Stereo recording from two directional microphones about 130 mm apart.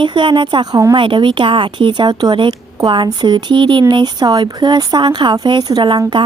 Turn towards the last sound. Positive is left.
turn(degrees=-35)  # may be behind; listen again after turning